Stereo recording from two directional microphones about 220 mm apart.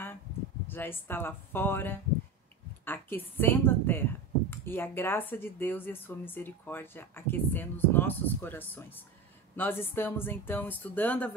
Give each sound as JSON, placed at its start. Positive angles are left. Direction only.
{"t": 0.7, "sound": "speech", "side_deg": 10}